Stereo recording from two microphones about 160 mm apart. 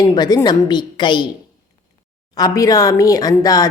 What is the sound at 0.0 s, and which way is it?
Speech, 25° left (ahead or behind).